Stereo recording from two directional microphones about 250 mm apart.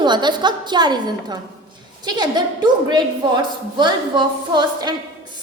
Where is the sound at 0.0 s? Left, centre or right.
Centre.